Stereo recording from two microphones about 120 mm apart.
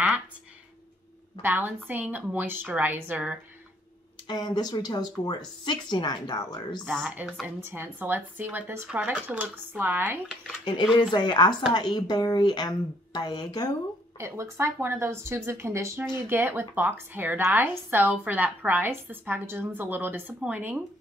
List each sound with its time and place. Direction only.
1.4 s a woman's voice: 15° right (ahead or behind)
4.3 s speech: 35° left (ahead or behind)
6.9 s a woman's voice: 10° right (ahead or behind)
10.6 s speech: 40° left (ahead or behind)
14.1 s a woman's voice: 25° right (ahead or behind)